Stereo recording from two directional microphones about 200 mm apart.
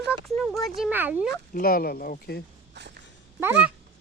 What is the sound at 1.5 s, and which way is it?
Speech, 45° left (ahead or behind).